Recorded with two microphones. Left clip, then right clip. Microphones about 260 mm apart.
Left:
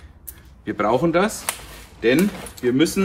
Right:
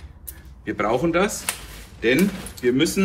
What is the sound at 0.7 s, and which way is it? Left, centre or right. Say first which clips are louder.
Speech: left 2 dB; centre.